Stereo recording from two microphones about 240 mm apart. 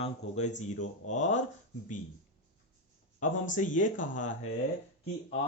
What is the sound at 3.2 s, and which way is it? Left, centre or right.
Speech, left.